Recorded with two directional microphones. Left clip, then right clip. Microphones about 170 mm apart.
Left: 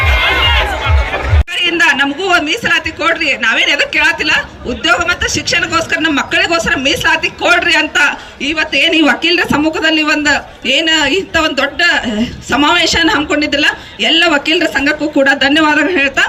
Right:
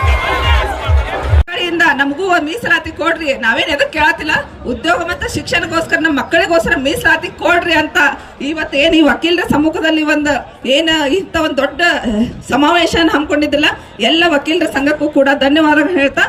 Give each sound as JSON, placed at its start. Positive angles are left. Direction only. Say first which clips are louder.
{"t": 1.6, "sound": "a woman's voice", "louder": "left 2 dB", "side_deg": -40}